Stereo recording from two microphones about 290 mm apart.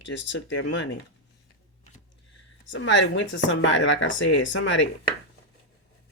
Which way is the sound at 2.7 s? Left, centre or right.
Left.